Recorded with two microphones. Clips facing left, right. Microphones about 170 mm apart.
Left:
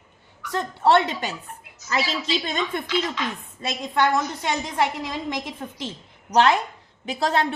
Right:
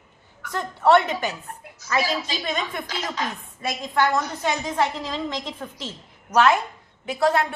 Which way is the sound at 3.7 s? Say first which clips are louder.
Even; 20° left (ahead or behind).